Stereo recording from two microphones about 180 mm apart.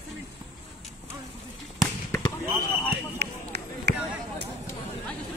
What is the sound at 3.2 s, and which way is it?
Run, 65° right (ahead or behind).